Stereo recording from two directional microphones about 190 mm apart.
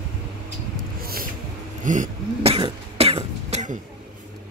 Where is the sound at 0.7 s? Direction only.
50° right (ahead or behind).